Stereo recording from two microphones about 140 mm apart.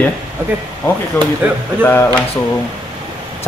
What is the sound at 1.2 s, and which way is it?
Speech, 15° left (ahead or behind).